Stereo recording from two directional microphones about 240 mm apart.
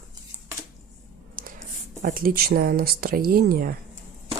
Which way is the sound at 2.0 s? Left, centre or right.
Right.